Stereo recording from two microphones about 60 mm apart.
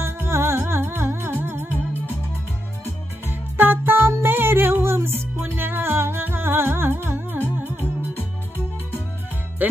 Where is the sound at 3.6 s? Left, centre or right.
Right.